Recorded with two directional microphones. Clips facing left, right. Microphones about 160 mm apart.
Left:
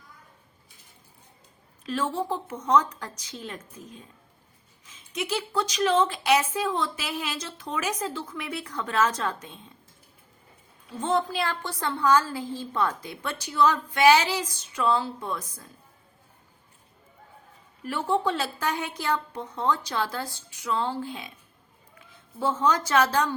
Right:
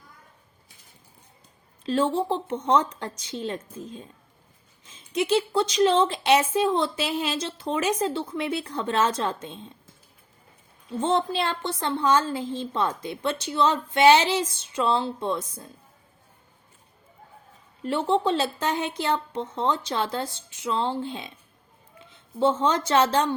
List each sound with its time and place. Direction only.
1.8 s speech: 30° right (ahead or behind)
11.0 s speech: 25° right (ahead or behind)
17.8 s a woman's voice: 25° right (ahead or behind)